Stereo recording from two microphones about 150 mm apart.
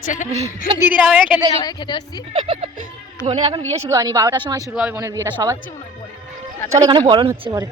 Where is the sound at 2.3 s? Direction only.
45° right (ahead or behind).